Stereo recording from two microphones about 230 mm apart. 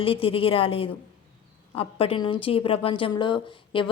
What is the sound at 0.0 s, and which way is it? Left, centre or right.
A woman's voice, left.